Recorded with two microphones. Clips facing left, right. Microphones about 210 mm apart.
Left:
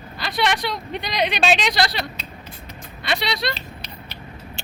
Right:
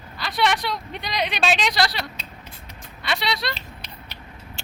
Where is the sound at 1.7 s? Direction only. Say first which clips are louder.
Left 1 dB; 20° left (ahead or behind).